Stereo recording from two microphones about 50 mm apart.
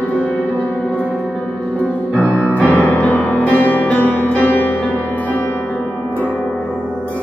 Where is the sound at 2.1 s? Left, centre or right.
Left.